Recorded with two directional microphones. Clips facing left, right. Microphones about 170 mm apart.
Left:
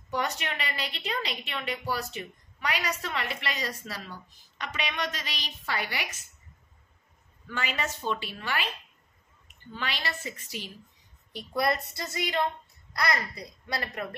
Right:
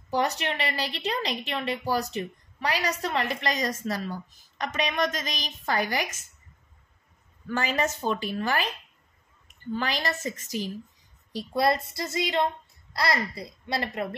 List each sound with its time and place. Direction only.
0.1 s a woman's voice: 35° right (ahead or behind)
7.4 s a woman's voice: 45° right (ahead or behind)
9.8 s a woman's voice: 40° right (ahead or behind)
11.3 s a child's voice: 30° right (ahead or behind)